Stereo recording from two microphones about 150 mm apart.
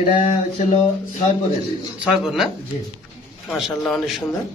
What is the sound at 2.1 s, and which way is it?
Speech, 5° right (ahead or behind).